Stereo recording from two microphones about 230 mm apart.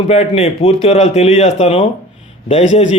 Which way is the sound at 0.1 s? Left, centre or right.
Left.